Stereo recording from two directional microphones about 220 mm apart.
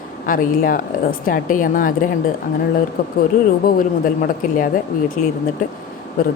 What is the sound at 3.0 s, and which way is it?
A woman's voice, 40° left (ahead or behind).